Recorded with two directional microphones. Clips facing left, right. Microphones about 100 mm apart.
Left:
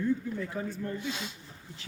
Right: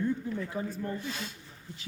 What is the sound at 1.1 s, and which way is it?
Speech, 20° left (ahead or behind).